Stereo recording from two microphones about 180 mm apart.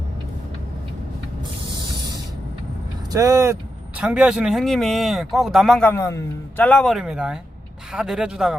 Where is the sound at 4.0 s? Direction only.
5° right (ahead or behind).